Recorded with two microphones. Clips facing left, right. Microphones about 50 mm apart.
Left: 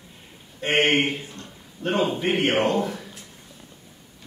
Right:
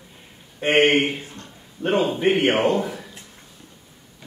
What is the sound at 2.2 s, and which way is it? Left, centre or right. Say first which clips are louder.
Speech: right 4 dB; centre.